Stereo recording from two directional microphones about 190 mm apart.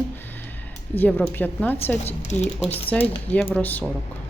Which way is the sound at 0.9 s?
10° left (ahead or behind).